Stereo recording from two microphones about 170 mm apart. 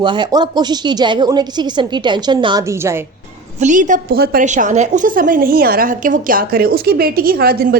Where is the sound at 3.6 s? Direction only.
45° right (ahead or behind).